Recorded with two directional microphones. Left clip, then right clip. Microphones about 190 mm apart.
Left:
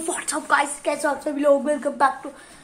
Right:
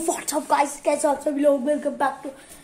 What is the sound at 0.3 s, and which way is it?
Speech, 10° right (ahead or behind).